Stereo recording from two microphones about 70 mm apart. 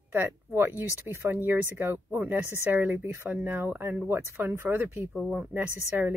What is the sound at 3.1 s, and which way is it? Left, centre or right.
Speech, right.